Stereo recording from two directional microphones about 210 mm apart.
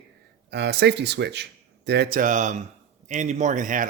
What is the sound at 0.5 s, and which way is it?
Speech, 50° right (ahead or behind).